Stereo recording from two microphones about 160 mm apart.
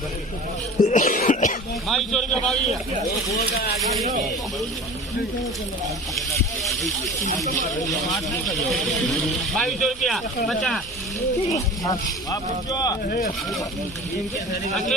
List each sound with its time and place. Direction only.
0.8 s cough: 50° left (ahead or behind)
1.9 s speech: centre (ahead or behind)
6.6 s speech: centre (ahead or behind)
8.4 s speech: centre (ahead or behind)
11.4 s speech: 20° left (ahead or behind)
13.1 s speech: 65° left (ahead or behind)